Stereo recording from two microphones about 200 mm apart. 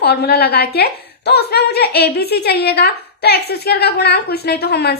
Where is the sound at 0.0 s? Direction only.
55° left (ahead or behind).